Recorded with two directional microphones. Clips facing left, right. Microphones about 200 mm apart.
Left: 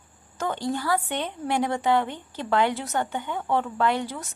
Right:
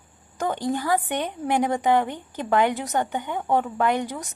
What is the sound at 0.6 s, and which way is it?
A woman's voice, 15° right (ahead or behind).